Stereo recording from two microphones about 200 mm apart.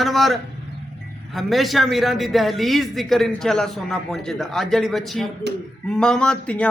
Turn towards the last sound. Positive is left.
turn(degrees=5)  # may be behind; listen again after turning